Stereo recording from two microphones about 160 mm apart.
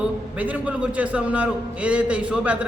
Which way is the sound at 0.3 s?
10° right (ahead or behind).